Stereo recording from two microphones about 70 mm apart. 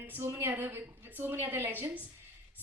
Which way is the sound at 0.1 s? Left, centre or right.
Right.